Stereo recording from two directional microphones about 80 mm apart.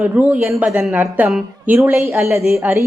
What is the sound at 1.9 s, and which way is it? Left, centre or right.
Speech, right.